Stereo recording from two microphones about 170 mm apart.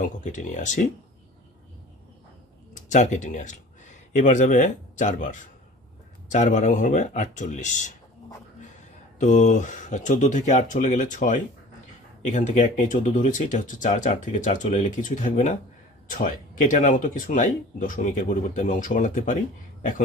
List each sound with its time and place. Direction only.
0.2 s speech: 45° left (ahead or behind)
2.7 s speech: 45° left (ahead or behind)
9.2 s speech: 45° left (ahead or behind)